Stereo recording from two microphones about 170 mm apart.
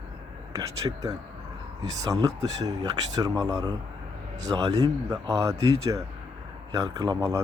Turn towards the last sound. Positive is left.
turn(degrees=-20)  # may be behind; listen again after turning